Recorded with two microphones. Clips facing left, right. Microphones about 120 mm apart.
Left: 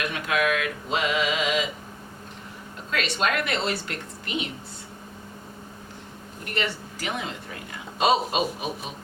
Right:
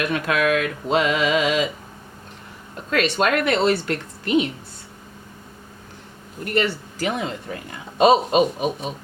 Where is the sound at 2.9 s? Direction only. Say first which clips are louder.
Right 6 dB; 50° right (ahead or behind).